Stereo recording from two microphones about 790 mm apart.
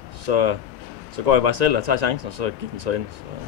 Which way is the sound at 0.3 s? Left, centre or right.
Right.